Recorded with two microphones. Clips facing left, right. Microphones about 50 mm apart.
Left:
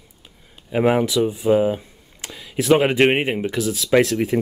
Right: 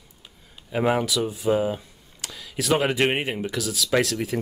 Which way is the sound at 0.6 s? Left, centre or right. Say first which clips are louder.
Left 5 dB; centre.